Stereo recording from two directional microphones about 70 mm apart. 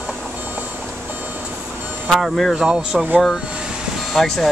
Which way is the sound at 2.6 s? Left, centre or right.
Centre.